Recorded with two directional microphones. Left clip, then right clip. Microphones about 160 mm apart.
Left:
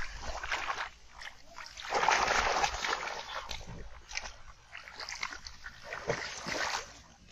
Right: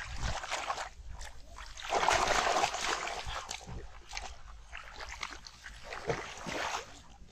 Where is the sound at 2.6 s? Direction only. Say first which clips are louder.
Even; 35° right (ahead or behind).